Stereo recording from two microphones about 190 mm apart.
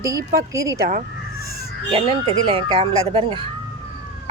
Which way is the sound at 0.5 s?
15° right (ahead or behind).